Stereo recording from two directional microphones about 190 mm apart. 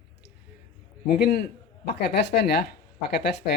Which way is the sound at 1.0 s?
50° left (ahead or behind).